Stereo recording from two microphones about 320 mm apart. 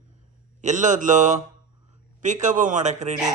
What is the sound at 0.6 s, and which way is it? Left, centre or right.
Speech, right.